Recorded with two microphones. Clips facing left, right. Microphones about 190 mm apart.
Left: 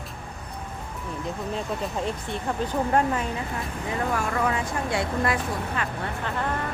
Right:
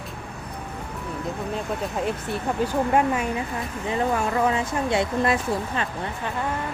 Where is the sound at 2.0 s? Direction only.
5° right (ahead or behind).